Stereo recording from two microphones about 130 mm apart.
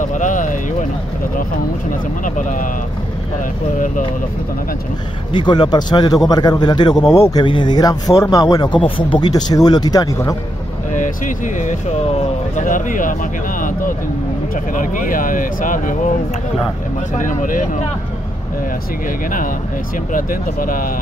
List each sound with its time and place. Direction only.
0.0 s a sound: 85° left
2.2 s speech: 90° left
5.3 s a man's voice: 35° left (ahead or behind)
10.9 s speech: 75° left (ahead or behind)
12.1 s speech: 65° left (ahead or behind); by 16.0 s 90° left
17.1 s speech: 80° left
20.1 s speech: 90° left